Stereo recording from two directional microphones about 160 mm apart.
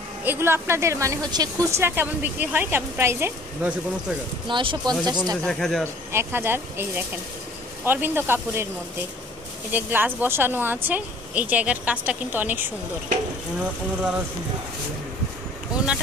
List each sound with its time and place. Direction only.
0.2 s speech: 15° right (ahead or behind)
4.5 s speech: 30° right (ahead or behind)
5.4 s speech: 5° left (ahead or behind)
6.1 s speech: 15° right (ahead or behind)
9.7 s speech: 10° right (ahead or behind)
15.7 s a sound: 5° right (ahead or behind)